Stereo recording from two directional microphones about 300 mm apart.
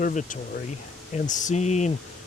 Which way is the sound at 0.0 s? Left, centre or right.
Left.